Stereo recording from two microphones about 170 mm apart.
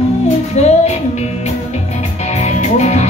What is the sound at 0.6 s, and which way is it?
Music, 40° left (ahead or behind).